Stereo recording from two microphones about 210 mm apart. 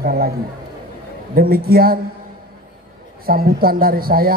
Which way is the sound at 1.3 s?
45° right (ahead or behind).